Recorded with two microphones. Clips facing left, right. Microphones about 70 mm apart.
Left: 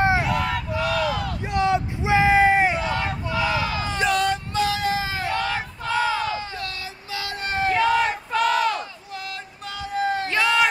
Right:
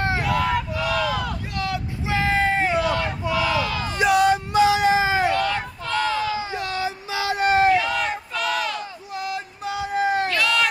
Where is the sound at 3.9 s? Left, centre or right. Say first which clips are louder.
Right 5 dB; centre.